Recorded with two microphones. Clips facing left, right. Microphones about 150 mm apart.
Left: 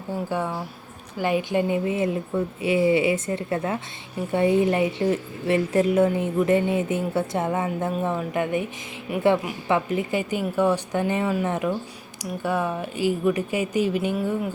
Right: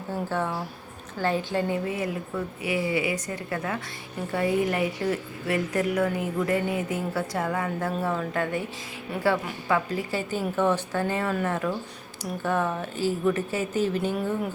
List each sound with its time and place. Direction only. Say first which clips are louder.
0.1 s a woman's voice: left 2 dB; 15° left (ahead or behind)